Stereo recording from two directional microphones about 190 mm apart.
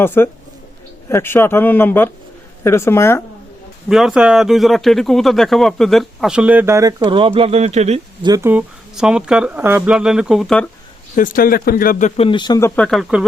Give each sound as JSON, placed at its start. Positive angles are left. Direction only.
{"t": 0.0, "sound": "speech", "side_deg": 10}
{"t": 3.8, "sound": "speech", "side_deg": 0}
{"t": 8.2, "sound": "speech", "side_deg": -15}
{"t": 11.1, "sound": "speech", "side_deg": 45}